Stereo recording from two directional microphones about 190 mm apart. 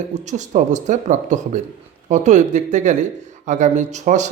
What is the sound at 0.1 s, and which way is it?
Speech, 40° right (ahead or behind).